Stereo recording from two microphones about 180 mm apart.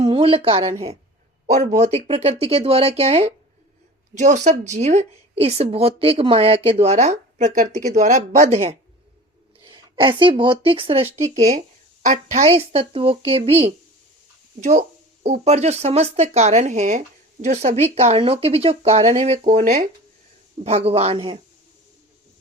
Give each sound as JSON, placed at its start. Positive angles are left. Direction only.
{"t": 0.0, "sound": "a woman's voice", "side_deg": -30}
{"t": 9.6, "sound": "speech", "side_deg": -25}